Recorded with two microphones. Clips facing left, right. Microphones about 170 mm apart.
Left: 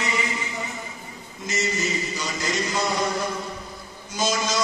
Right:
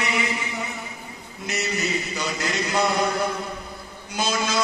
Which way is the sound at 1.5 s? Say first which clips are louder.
Even; 65° right (ahead or behind).